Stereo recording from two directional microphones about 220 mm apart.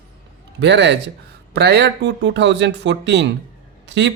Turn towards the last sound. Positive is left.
turn(degrees=-55)  # may be behind; listen again after turning